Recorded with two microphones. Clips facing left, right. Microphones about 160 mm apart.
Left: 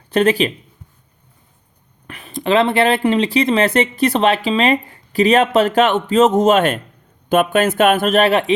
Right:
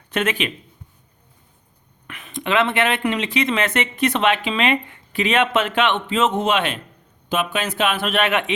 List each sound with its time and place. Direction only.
0.1 s speech: 35° left (ahead or behind)
2.0 s speech: 35° left (ahead or behind)